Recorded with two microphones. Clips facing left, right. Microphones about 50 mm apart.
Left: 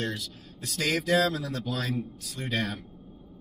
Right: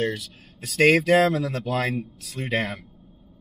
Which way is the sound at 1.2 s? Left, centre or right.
Right.